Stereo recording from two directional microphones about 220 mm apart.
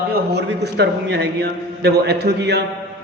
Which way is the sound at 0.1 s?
50° right (ahead or behind).